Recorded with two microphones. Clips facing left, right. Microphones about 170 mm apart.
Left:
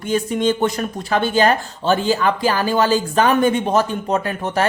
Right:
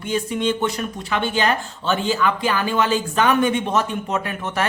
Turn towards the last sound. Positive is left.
turn(degrees=35)  # may be behind; listen again after turning